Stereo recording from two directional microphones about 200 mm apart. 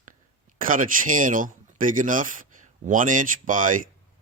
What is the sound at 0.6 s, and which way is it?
Speech, 45° right (ahead or behind).